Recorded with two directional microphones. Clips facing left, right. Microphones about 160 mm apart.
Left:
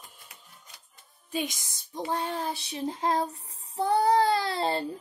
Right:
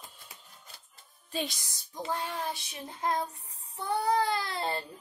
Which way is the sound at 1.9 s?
30° left (ahead or behind).